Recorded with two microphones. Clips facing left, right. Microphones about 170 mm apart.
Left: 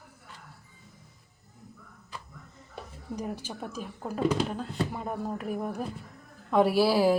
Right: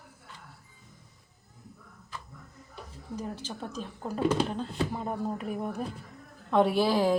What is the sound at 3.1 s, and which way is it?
A woman's voice, 15° left (ahead or behind).